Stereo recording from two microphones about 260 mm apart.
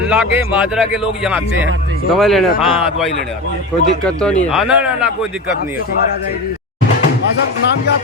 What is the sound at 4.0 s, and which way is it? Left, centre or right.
A man's voice, centre.